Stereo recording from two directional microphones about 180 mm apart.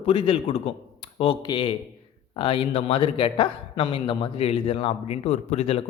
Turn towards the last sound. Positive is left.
turn(degrees=35)  # may be behind; listen again after turning